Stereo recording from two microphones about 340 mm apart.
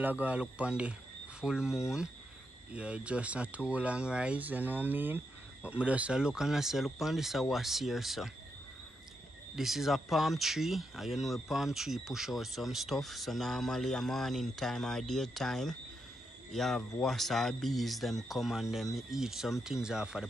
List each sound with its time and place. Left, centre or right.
0.0 s speech: centre
9.6 s speech: centre